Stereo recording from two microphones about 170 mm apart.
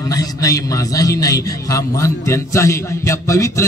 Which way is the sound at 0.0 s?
20° left (ahead or behind).